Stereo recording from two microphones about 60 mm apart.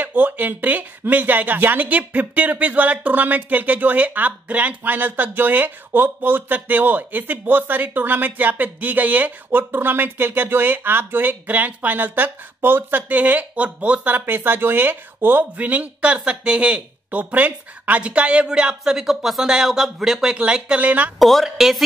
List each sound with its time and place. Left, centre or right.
0.0 s speech: right
21.2 s speech: centre